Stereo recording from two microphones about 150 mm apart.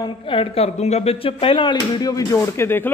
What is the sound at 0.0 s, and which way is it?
A man's voice, 35° left (ahead or behind).